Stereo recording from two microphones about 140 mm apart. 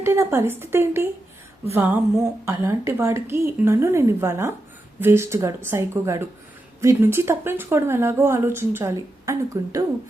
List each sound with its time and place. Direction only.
0.0 s a woman's voice: 20° right (ahead or behind)